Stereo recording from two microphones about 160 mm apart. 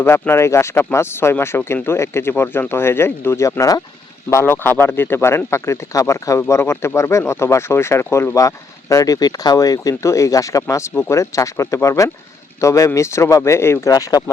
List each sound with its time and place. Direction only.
0.0 s speech: 15° left (ahead or behind)